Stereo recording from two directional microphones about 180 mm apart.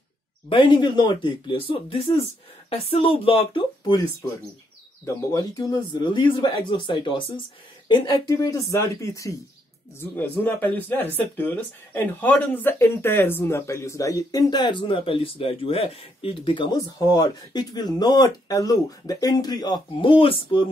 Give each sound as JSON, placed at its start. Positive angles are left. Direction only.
{"t": 0.5, "sound": "speech", "side_deg": 25}
{"t": 5.0, "sound": "speech", "side_deg": 20}